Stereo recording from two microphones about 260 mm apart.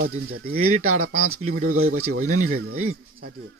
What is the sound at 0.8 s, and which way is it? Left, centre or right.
Speech, right.